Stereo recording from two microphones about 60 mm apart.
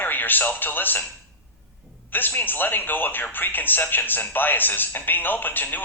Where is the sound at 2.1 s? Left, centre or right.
Left.